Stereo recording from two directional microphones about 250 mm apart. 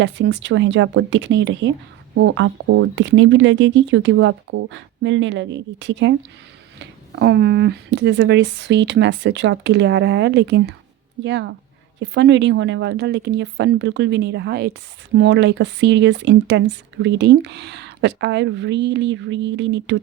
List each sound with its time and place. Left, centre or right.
0.0 s speech: right